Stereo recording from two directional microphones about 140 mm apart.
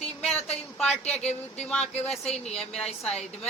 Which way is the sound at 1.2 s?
50° left (ahead or behind).